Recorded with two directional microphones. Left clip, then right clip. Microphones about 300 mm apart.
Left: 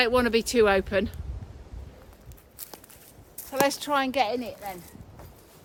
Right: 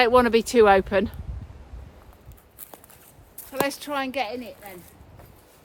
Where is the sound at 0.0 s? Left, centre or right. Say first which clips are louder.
Right 5 dB; centre.